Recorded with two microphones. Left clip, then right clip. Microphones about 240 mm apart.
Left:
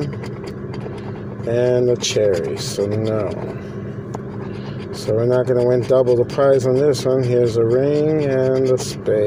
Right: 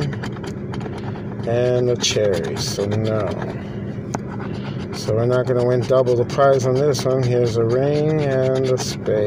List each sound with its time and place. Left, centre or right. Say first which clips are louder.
1.5 s speech: left 2 dB; centre
5.1 s speech: left 2 dB; centre